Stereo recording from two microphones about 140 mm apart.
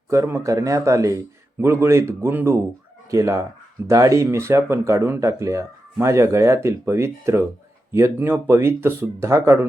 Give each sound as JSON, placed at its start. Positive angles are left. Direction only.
{"t": 0.1, "sound": "speech", "side_deg": -20}